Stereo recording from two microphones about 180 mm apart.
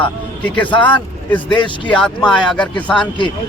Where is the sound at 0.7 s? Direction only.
25° left (ahead or behind).